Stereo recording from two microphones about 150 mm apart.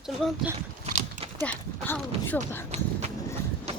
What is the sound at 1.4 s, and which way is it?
Speech, 10° left (ahead or behind).